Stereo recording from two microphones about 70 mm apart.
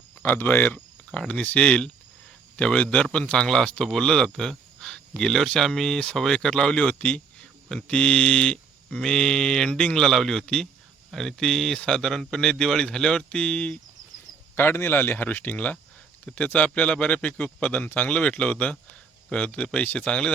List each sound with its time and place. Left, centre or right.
0.2 s speech: left
14.5 s speech: left; by 20.3 s centre